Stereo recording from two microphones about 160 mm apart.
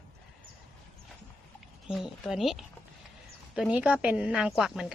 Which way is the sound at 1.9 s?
5° right (ahead or behind).